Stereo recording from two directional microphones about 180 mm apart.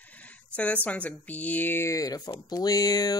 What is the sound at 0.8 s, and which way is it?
Speech, 10° left (ahead or behind).